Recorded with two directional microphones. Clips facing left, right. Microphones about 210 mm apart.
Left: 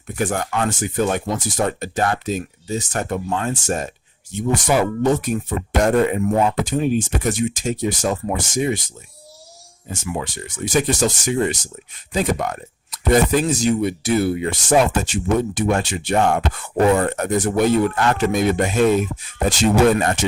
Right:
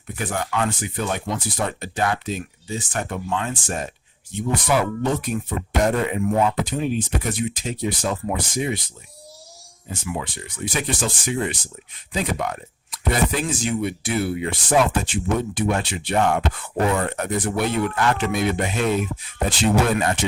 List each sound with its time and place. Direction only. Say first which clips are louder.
0.2 s speech: left 3 dB; 45° left (ahead or behind)
4.5 s speech: left 3 dB; 45° left (ahead or behind)
9.9 s speech: left 3 dB; 45° left (ahead or behind)